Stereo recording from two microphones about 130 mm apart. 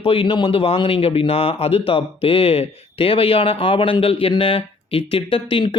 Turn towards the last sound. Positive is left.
turn(degrees=40)  # may be behind; listen again after turning